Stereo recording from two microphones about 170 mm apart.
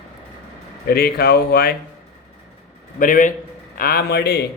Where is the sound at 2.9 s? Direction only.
55° left (ahead or behind).